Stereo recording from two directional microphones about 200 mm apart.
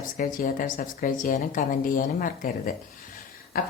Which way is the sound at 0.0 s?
40° left (ahead or behind).